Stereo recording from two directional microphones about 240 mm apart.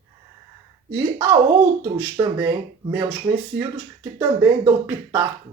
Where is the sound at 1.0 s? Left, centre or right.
Centre.